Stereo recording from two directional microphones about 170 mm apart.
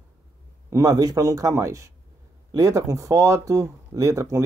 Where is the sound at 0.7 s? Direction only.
20° right (ahead or behind).